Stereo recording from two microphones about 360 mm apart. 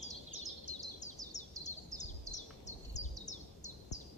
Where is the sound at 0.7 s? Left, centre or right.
Centre.